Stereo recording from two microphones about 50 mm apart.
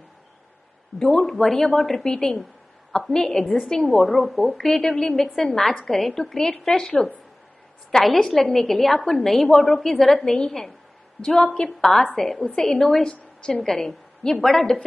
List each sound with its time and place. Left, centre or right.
0.9 s a woman's voice: centre
7.9 s a woman's voice: centre
12.4 s a woman's voice: left